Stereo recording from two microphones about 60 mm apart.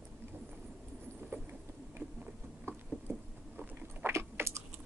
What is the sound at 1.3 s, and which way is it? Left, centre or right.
Vehicle, right.